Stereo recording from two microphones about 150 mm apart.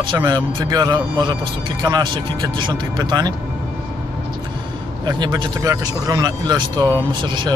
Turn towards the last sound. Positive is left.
turn(degrees=-30)  # may be behind; listen again after turning